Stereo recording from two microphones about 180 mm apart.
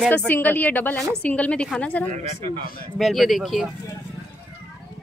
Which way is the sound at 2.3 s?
30° right (ahead or behind).